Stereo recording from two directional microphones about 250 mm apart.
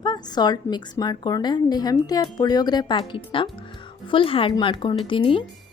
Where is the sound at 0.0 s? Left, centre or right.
Centre.